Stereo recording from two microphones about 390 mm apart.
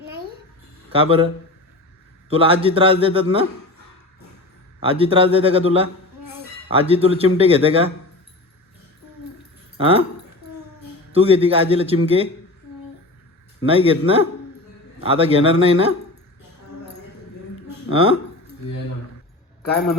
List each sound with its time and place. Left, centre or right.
0.0 s a sound: right
0.9 s a man's voice: centre
2.3 s speech: centre
4.8 s speech: centre
9.7 s speech: centre
11.1 s speech: centre
13.6 s speech: centre
17.8 s speech: centre